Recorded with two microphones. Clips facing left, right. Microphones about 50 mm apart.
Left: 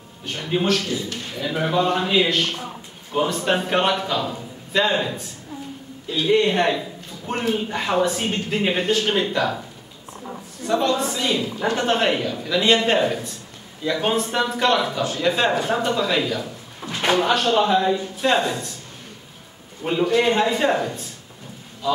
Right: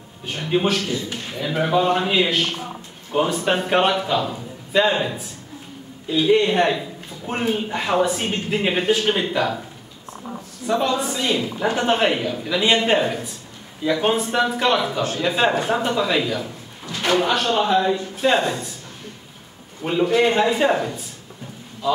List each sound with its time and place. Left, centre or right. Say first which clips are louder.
0.2 s speech: right 2 dB; centre
10.7 s speech: even; centre
16.8 s a man's voice: even; left
17.2 s speech: left 1 dB; centre
19.8 s speech: right 1 dB; centre